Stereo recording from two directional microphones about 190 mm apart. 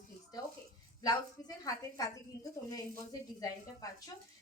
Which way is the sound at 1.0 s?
20° left (ahead or behind).